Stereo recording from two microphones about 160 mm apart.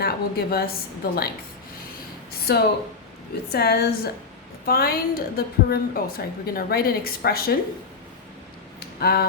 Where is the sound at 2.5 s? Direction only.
90° left.